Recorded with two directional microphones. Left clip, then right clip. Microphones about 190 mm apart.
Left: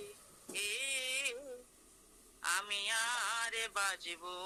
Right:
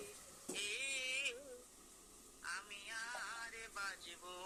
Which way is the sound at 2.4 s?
45° left (ahead or behind).